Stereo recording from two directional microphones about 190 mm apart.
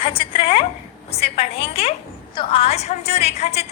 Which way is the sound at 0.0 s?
25° left (ahead or behind).